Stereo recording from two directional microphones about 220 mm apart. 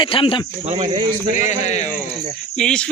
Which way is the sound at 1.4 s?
30° left (ahead or behind).